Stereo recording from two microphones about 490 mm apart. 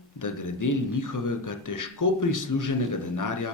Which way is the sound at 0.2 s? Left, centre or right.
Left.